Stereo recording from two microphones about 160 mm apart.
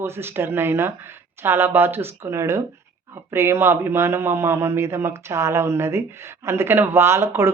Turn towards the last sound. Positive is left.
turn(degrees=-15)  # may be behind; listen again after turning